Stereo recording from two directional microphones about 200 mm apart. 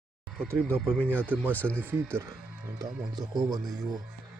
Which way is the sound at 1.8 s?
10° right (ahead or behind).